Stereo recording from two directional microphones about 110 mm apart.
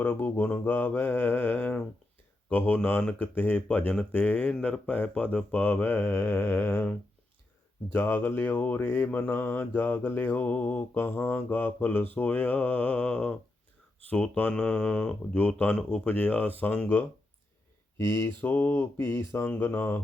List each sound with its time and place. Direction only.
0.0 s mantra: 15° left (ahead or behind)
7.9 s mantra: 20° left (ahead or behind)
17.9 s speech: 20° left (ahead or behind)
18.4 s mantra: 20° left (ahead or behind)